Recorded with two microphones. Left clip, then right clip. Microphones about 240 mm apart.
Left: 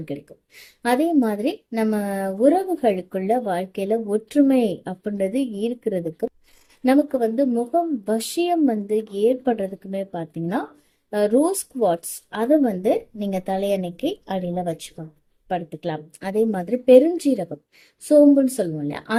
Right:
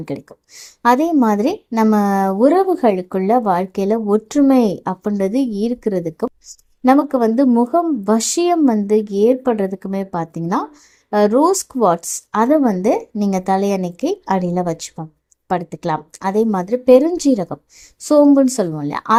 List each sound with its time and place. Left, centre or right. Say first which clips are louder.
0.0 s a woman's voice: right 5 dB; right
13.7 s speech: right 3 dB; right
13.9 s a woman's voice: right 7 dB; right
18.5 s a woman's voice: right 5 dB; right